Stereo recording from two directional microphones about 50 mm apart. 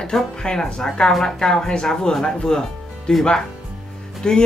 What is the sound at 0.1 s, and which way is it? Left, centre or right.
Speech, centre.